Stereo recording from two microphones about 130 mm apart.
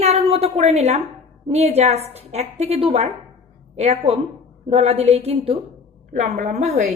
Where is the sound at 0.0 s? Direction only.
50° right (ahead or behind).